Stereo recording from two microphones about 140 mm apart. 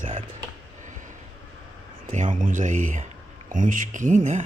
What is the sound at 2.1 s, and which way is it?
Speech, 65° right (ahead or behind).